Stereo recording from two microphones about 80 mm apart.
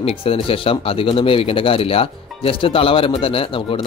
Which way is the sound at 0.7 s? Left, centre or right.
Left.